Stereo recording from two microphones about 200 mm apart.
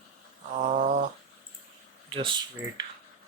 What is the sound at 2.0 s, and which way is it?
Speech, 25° right (ahead or behind).